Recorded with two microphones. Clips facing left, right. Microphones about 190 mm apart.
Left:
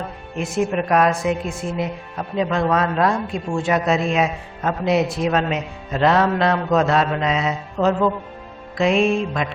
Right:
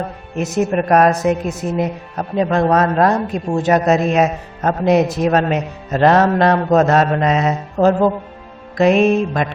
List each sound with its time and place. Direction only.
0.0 s speech: 40° right (ahead or behind)